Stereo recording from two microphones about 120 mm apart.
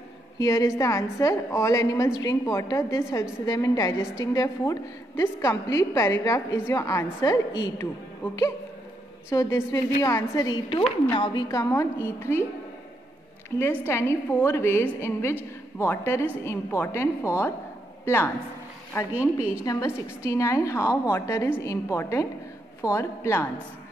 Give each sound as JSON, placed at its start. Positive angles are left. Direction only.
{"t": 0.4, "sound": "a woman's voice", "side_deg": 30}
{"t": 9.3, "sound": "a woman's voice", "side_deg": 25}
{"t": 11.4, "sound": "a woman's voice", "side_deg": 25}
{"t": 13.6, "sound": "a woman's voice", "side_deg": 20}